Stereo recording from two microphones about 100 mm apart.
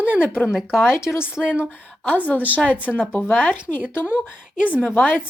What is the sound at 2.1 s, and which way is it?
Speech, 15° left (ahead or behind).